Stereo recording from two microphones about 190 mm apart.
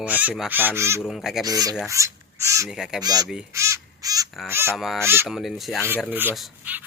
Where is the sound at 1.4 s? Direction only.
20° right (ahead or behind).